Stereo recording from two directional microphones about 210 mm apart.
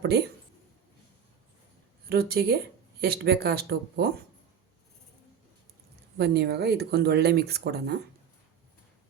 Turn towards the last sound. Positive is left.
turn(degrees=-50)  # may be behind; listen again after turning